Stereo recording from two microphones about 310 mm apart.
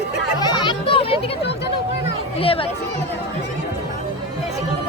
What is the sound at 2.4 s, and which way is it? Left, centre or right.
Speech, centre.